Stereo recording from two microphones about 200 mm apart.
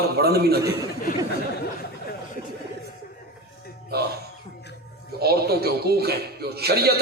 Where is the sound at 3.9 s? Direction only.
50° right (ahead or behind).